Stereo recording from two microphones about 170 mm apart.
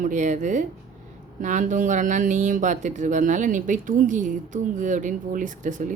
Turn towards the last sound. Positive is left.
turn(degrees=-50)  # may be behind; listen again after turning